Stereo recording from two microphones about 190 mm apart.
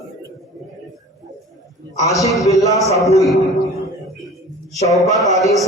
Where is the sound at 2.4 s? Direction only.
15° left (ahead or behind).